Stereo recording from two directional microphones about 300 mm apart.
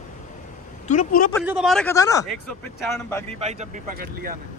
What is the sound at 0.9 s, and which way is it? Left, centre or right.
Speech, left.